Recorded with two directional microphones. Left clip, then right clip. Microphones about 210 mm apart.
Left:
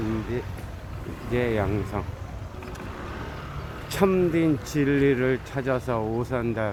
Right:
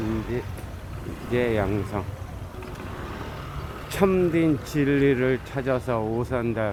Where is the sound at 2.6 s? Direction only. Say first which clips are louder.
Even; 50° right (ahead or behind).